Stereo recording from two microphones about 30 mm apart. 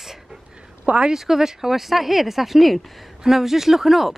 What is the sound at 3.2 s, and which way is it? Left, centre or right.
Speech, centre.